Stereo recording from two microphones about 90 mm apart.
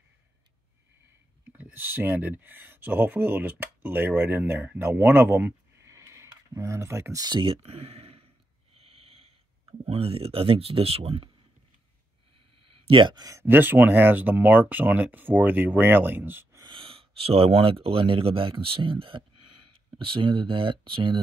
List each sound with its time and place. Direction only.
1.6 s speech: 20° right (ahead or behind)
7.2 s speech: 50° right (ahead or behind)
7.4 s speech: 90° right
8.7 s a sound: 90° right
12.8 s speech: 65° right (ahead or behind)
13.2 s speech: 35° right (ahead or behind)
13.5 s speech: 25° right (ahead or behind)
16.6 s speech: 75° right (ahead or behind)